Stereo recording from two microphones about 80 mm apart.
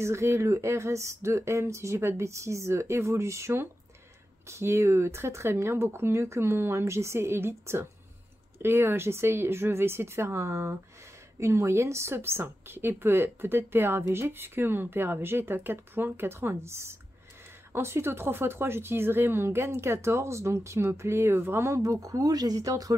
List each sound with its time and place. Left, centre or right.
0.0 s a woman's voice: right